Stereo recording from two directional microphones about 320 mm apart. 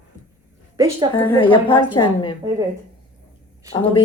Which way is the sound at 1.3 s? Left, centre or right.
Centre.